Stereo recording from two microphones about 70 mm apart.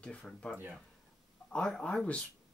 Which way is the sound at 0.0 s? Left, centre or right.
Centre.